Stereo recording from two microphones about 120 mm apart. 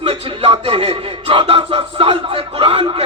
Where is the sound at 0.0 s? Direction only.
55° right (ahead or behind).